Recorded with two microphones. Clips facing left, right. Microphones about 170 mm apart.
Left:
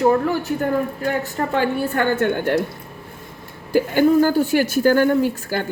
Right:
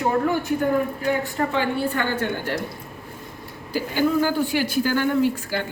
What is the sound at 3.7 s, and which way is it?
A woman's voice, 55° left (ahead or behind).